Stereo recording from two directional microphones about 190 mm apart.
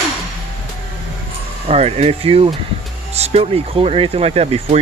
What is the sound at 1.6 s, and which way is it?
Speech, 35° right (ahead or behind).